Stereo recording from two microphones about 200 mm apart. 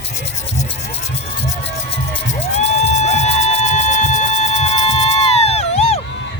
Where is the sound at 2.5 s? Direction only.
35° left (ahead or behind).